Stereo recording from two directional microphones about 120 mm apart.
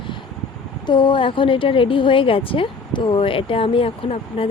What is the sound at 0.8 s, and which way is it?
A woman's voice, 40° left (ahead or behind).